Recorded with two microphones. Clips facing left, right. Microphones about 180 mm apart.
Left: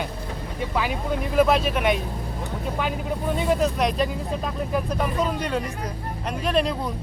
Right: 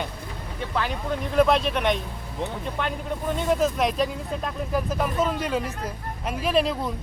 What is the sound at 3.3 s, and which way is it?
Speech, centre (ahead or behind).